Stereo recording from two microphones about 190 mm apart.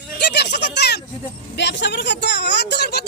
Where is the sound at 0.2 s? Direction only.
60° left (ahead or behind).